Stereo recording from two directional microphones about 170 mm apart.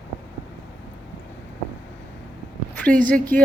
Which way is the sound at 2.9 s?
5° left (ahead or behind).